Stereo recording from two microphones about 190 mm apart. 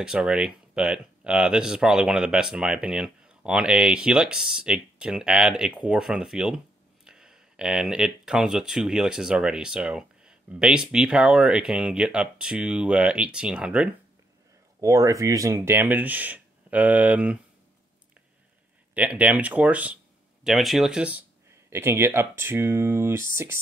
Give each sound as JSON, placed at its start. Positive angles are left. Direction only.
{"t": 0.0, "sound": "speech", "side_deg": -5}
{"t": 14.8, "sound": "speech", "side_deg": -15}
{"t": 18.9, "sound": "speech", "side_deg": -5}